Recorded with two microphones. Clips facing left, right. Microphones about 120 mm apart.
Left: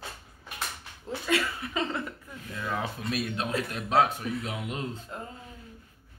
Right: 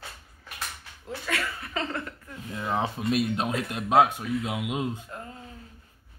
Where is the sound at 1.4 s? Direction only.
15° left (ahead or behind).